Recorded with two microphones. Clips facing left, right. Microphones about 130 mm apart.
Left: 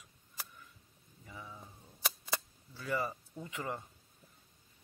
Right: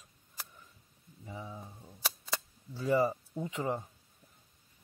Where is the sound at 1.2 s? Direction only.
25° right (ahead or behind).